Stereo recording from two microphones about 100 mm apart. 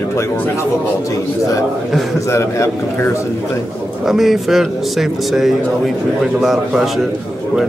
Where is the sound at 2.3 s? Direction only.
30° left (ahead or behind).